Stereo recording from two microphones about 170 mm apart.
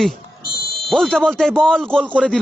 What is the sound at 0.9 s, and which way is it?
Speech, 5° left (ahead or behind).